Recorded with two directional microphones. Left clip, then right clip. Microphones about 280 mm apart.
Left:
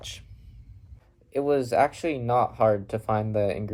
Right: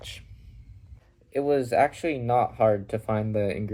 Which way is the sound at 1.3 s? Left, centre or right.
Centre.